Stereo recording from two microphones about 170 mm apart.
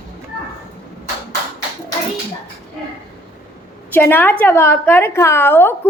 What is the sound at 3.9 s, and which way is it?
A woman's voice, 10° left (ahead or behind).